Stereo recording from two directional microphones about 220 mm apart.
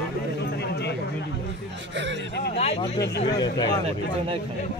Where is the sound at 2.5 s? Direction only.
30° left (ahead or behind).